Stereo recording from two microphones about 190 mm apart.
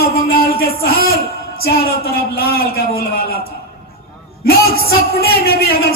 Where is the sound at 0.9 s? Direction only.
55° left (ahead or behind).